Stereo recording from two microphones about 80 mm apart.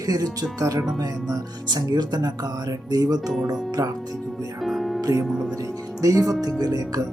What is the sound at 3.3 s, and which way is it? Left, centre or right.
Speech, centre.